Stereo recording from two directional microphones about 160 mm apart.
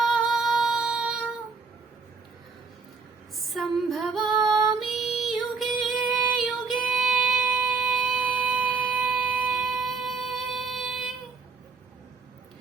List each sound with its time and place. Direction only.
0.0 s music: 5° right (ahead or behind)
3.3 s female singing: centre (ahead or behind)
9.0 s a sound: 5° right (ahead or behind)